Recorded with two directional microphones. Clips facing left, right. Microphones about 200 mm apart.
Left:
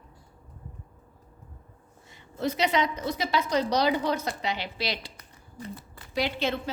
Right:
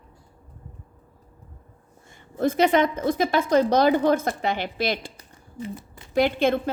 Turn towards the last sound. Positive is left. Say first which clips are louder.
# right 8 dB
turn(degrees=-50)  # may be behind; listen again after turning